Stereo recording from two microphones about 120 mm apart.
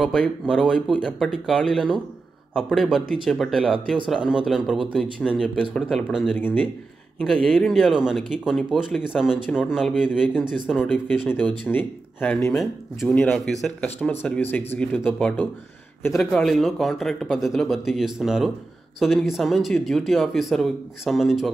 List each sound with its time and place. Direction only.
0.0 s speech: 5° left (ahead or behind)
6.3 s speech: 15° left (ahead or behind); by 10.4 s 5° right (ahead or behind)
10.8 s speech: 10° left (ahead or behind)
13.8 s speech: 15° left (ahead or behind); by 21.5 s centre (ahead or behind)